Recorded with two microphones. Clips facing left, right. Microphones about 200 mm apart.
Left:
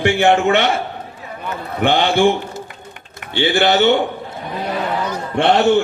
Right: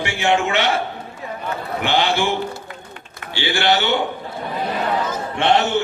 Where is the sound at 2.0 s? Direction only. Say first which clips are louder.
Left 6 dB; 55° left (ahead or behind).